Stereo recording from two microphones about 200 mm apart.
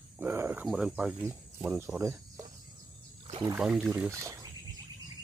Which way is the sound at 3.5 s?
Centre (ahead or behind).